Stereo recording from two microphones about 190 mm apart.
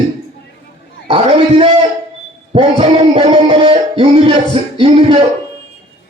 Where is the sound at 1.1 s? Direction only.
30° right (ahead or behind).